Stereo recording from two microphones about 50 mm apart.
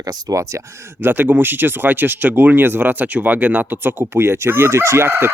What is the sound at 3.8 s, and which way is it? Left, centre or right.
Speech, right.